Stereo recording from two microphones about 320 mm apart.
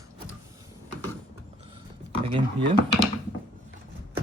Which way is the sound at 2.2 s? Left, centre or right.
Centre.